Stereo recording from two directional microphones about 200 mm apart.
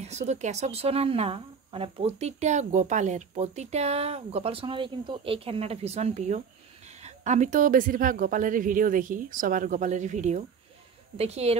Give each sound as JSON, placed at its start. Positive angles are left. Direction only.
{"t": 0.0, "sound": "a woman's voice", "side_deg": -35}